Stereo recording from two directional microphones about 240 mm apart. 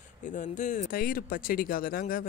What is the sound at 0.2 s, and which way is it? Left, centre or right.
Speech, left.